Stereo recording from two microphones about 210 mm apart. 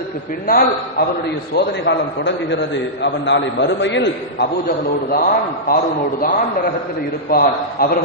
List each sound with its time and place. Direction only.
0.5 s a man's voice: 45° left (ahead or behind)
1.5 s a man's voice: 55° left (ahead or behind)
7.2 s a man's voice: 45° left (ahead or behind)